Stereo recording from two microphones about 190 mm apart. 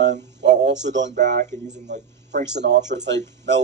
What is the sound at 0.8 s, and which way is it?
Speech, 70° right (ahead or behind).